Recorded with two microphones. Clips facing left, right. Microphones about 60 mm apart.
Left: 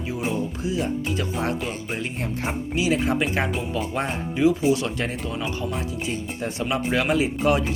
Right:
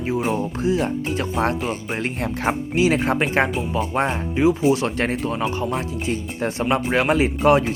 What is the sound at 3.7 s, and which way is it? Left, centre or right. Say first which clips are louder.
Speech: right 7 dB; right.